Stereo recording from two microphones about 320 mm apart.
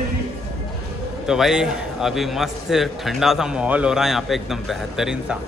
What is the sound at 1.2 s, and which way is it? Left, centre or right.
A man's voice, centre.